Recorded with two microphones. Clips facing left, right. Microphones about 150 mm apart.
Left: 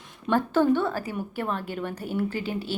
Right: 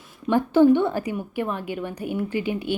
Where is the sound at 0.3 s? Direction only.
15° right (ahead or behind).